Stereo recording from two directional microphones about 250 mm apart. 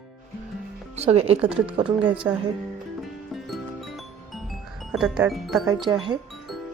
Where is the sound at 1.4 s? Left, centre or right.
Centre.